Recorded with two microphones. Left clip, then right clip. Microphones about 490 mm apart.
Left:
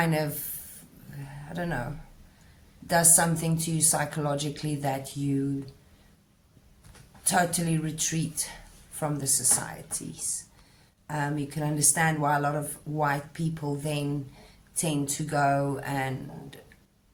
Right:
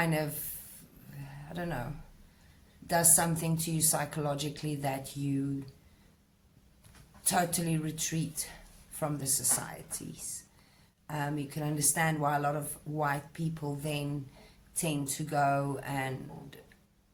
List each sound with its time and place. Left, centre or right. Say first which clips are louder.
0.0 s a woman's voice: left 4 dB; right
1.3 s a sound: left 5 dB; right
2.8 s a woman's voice: left 5 dB; right
7.3 s a woman's voice: left 5 dB; right
11.0 s a woman's voice: left 5 dB; right